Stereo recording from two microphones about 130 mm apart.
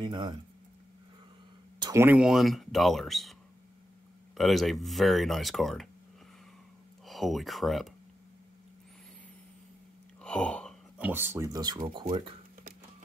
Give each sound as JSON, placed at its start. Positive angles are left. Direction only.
{"t": 0.0, "sound": "speech", "side_deg": -35}
{"t": 2.0, "sound": "speech", "side_deg": -10}
{"t": 4.4, "sound": "speech", "side_deg": 0}
{"t": 7.1, "sound": "speech", "side_deg": 0}
{"t": 10.2, "sound": "a sound", "side_deg": 5}
{"t": 11.0, "sound": "speech", "side_deg": -15}